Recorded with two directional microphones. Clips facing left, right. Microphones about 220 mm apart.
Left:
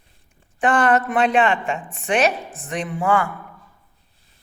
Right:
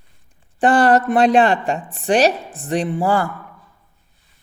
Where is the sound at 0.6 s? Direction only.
35° right (ahead or behind).